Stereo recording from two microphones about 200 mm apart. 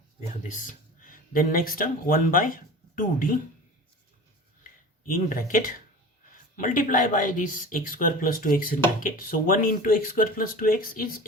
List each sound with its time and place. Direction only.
0.4 s speech: 40° left (ahead or behind)
4.6 s a sound: 45° left (ahead or behind)
6.6 s speech: 45° left (ahead or behind)